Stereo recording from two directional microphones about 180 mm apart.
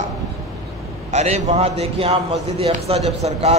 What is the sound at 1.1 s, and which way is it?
A man's voice, 40° right (ahead or behind).